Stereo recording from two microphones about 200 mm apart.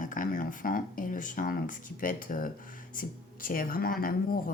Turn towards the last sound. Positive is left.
turn(degrees=45)  # may be behind; listen again after turning